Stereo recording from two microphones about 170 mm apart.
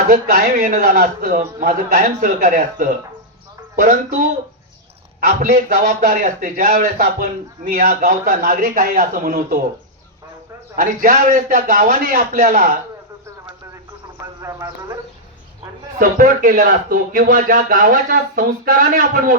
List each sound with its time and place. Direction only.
0.1 s a man's voice: 55° right (ahead or behind)
5.2 s a man's voice: 50° right (ahead or behind)
10.8 s a man's voice: 55° right (ahead or behind)
14.4 s a man's voice: 15° right (ahead or behind)
16.0 s a man's voice: 55° right (ahead or behind)